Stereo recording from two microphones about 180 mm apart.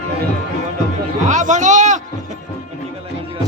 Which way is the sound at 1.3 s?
45° right (ahead or behind).